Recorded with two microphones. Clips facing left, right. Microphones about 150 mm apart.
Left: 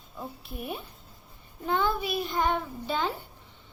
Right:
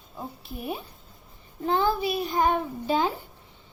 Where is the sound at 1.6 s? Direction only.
35° right (ahead or behind).